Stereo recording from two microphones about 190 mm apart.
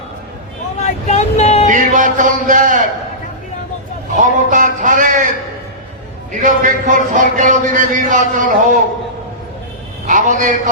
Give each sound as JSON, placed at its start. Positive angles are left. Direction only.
{"t": 0.8, "sound": "vehicle", "side_deg": 35}
{"t": 1.6, "sound": "music", "side_deg": -45}
{"t": 4.2, "sound": "speech", "side_deg": -45}
{"t": 6.4, "sound": "speech", "side_deg": -40}
{"t": 10.1, "sound": "a man's voice", "side_deg": -40}